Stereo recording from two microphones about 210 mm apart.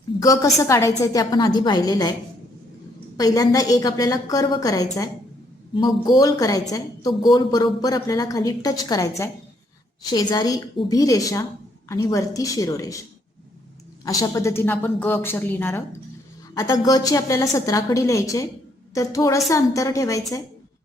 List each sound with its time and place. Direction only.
0.2 s a woman's voice: 15° left (ahead or behind)
3.2 s a woman's voice: 15° left (ahead or behind)
14.0 s a woman's voice: 15° left (ahead or behind)